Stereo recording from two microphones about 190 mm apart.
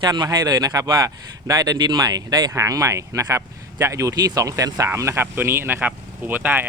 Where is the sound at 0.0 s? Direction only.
20° right (ahead or behind).